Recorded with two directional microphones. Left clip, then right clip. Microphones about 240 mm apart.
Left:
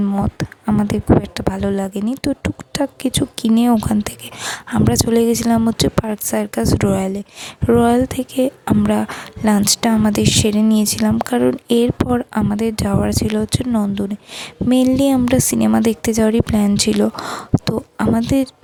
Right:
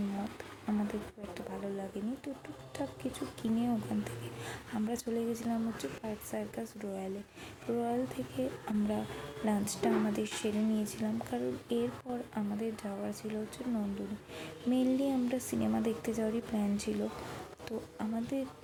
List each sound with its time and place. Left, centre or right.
1.3 s a woman's voice: left